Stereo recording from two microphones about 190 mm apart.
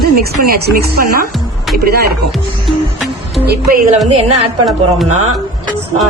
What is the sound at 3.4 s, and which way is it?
Speech, 55° right (ahead or behind).